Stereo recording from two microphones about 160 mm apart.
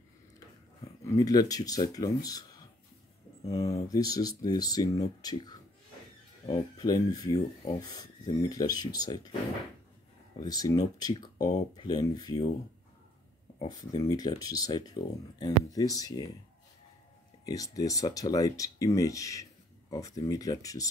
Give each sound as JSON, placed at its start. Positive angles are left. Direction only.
{"t": 1.0, "sound": "speech", "side_deg": 20}
{"t": 6.8, "sound": "speech", "side_deg": 25}
{"t": 10.4, "sound": "speech", "side_deg": 25}
{"t": 13.6, "sound": "speech", "side_deg": 25}
{"t": 17.5, "sound": "speech", "side_deg": 20}